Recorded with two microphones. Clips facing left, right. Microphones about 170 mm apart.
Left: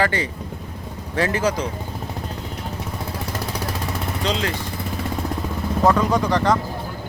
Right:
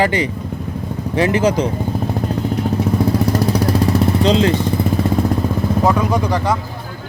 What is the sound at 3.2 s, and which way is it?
Vehicle, 40° right (ahead or behind).